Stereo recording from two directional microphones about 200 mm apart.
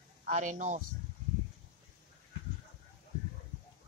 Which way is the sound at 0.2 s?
40° right (ahead or behind).